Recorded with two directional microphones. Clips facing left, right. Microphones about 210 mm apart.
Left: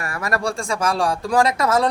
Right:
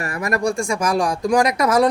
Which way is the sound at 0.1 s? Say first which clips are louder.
Right 3 dB; 15° right (ahead or behind).